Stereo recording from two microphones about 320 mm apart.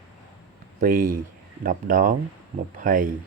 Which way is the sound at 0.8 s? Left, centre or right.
Right.